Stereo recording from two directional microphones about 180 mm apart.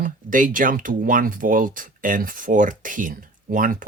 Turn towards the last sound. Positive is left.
turn(degrees=-50)  # may be behind; listen again after turning